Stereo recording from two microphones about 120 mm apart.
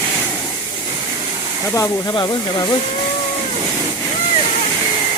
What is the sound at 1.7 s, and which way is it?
Speech, 25° left (ahead or behind).